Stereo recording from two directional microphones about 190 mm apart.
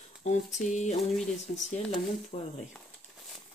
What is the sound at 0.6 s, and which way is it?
Speech, 40° left (ahead or behind).